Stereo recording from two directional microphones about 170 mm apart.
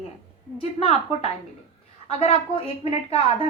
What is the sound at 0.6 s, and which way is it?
A woman's voice, 35° left (ahead or behind).